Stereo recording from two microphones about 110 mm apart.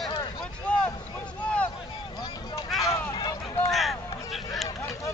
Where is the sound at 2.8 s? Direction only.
35° left (ahead or behind).